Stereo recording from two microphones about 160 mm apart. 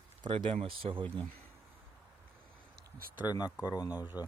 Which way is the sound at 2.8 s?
65° right (ahead or behind).